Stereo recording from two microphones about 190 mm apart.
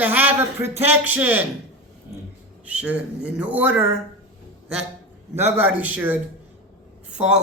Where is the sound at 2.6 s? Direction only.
5° right (ahead or behind).